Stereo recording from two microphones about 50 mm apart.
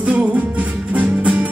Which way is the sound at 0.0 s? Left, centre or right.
Right.